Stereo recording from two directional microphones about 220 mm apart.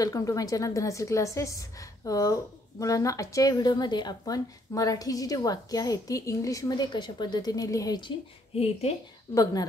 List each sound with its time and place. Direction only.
0.0 s a woman's voice: 15° left (ahead or behind)
9.3 s a woman's voice: 15° left (ahead or behind)